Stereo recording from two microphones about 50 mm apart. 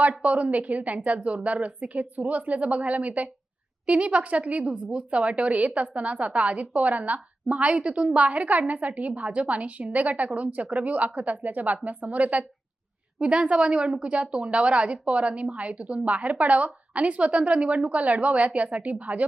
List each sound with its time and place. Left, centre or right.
0.2 s a woman's voice: right